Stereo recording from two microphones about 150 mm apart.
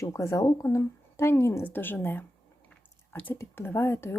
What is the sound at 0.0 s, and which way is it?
Speech, 20° left (ahead or behind).